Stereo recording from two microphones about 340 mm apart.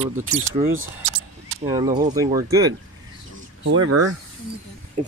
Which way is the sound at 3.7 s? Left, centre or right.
Right.